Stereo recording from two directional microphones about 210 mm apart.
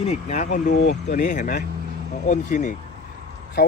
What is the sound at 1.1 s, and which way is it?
Speech, 35° left (ahead or behind).